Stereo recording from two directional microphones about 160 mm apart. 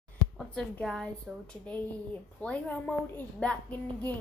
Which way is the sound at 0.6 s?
5° left (ahead or behind).